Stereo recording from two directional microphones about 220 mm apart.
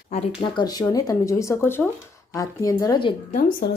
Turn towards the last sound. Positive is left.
turn(degrees=40)  # may be behind; listen again after turning